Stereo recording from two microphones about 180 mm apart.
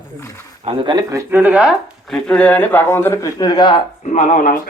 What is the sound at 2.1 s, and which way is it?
Speech, 5° left (ahead or behind).